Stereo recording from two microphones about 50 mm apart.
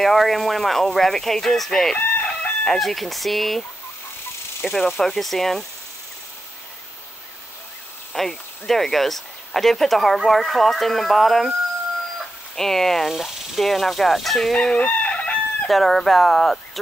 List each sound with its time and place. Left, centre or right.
0.0 s speech: centre
2.0 s chicken: left
2.6 s speech: centre
4.6 s speech: centre
8.1 s speech: centre
12.5 s speech: centre
13.1 s speech: centre
14.5 s crowing: centre
14.8 s chicken: left
15.7 s speech: centre